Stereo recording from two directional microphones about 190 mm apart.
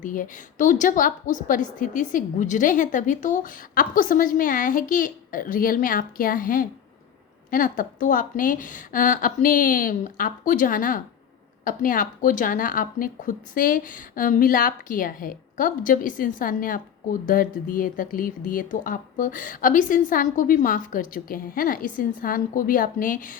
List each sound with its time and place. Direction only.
0.0 s speech: 45° left (ahead or behind)